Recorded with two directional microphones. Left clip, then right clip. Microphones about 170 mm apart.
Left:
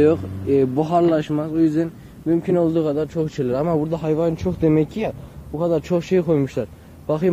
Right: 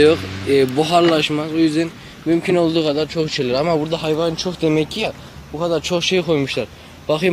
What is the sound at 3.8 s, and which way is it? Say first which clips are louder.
Speech: right 2 dB; 15° left (ahead or behind).